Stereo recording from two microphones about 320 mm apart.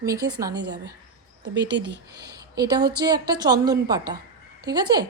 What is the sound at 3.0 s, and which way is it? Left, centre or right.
A woman's voice, centre.